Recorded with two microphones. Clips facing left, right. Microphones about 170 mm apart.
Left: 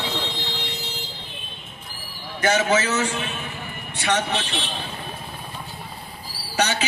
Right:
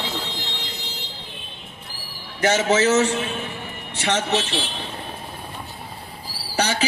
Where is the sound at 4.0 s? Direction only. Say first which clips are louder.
Right 1 dB; 30° right (ahead or behind).